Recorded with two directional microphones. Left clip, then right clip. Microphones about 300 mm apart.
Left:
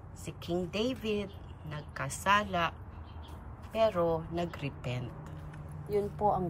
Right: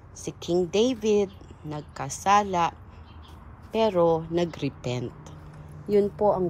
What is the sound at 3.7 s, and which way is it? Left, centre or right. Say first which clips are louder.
Speech: right 7 dB; centre.